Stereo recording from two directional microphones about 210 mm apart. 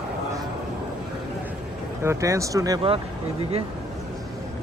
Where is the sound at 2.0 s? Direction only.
15° right (ahead or behind).